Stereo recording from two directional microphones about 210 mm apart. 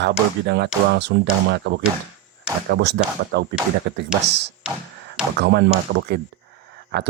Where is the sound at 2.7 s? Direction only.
55° right (ahead or behind).